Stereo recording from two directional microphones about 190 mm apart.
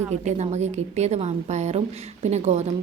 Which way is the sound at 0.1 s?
35° right (ahead or behind).